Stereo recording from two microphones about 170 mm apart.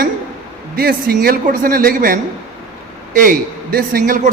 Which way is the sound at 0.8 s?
60° right (ahead or behind).